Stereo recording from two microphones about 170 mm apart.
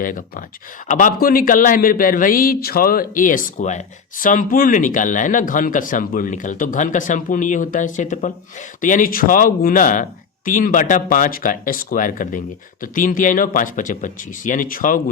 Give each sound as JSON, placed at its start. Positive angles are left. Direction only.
{"t": 0.0, "sound": "speech", "side_deg": 55}